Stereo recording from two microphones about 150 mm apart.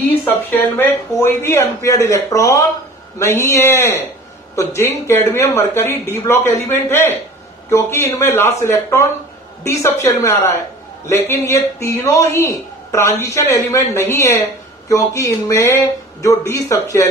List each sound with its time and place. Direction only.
0.0 s a man's voice: 15° left (ahead or behind)